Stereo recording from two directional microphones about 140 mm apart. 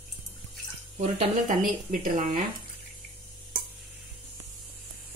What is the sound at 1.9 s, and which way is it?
Speech, 75° right (ahead or behind).